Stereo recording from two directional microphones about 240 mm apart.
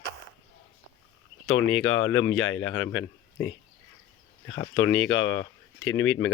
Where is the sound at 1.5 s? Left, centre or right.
Left.